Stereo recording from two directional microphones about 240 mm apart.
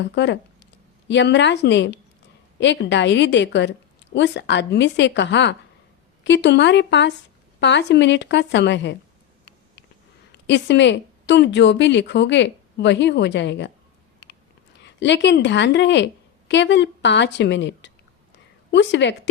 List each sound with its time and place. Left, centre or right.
0.0 s speech: left
10.3 s speech: left
14.9 s speech: left